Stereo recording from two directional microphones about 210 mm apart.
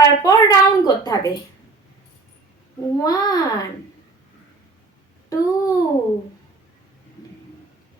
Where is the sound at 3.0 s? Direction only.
20° left (ahead or behind).